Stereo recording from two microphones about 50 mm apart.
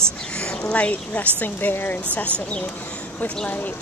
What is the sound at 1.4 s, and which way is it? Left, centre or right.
Speech, left.